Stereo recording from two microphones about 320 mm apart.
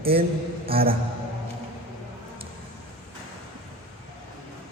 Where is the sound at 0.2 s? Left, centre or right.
Centre.